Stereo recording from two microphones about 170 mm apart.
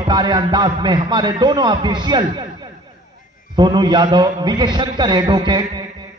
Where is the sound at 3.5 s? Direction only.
25° right (ahead or behind).